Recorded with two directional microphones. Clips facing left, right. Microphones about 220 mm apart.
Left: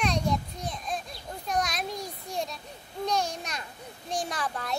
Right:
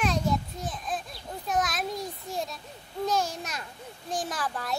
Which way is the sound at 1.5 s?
Centre (ahead or behind).